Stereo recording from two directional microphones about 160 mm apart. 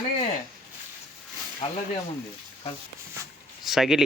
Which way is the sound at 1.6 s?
40° left (ahead or behind).